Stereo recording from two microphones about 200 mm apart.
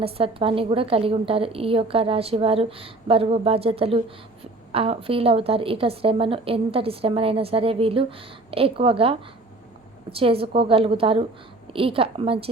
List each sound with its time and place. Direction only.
0.0 s a woman's voice: 30° right (ahead or behind)